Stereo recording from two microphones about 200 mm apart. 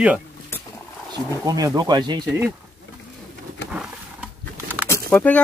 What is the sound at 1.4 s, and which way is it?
Speech, 15° right (ahead or behind).